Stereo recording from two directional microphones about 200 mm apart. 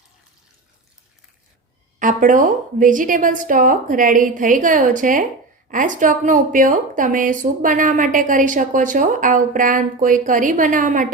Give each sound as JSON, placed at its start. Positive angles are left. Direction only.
{"t": 2.0, "sound": "a woman's voice", "side_deg": -40}